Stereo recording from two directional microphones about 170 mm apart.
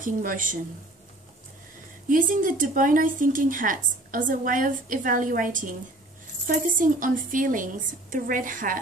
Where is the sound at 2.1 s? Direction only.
50° right (ahead or behind).